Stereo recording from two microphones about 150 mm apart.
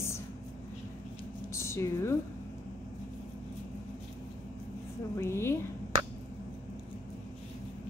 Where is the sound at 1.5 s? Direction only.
20° left (ahead or behind).